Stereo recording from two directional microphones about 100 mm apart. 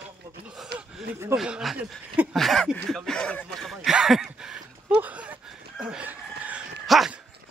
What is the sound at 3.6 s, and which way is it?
Speech, 5° right (ahead or behind).